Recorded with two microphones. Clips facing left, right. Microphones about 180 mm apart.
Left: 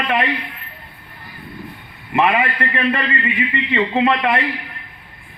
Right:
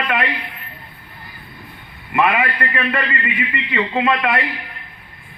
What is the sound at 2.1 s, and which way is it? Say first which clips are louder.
Speech: left 1 dB; 25° left (ahead or behind).